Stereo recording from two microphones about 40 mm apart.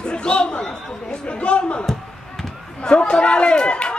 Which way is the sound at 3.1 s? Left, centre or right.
Left.